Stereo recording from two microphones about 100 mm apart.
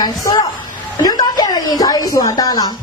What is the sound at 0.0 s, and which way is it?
Speech, 40° left (ahead or behind).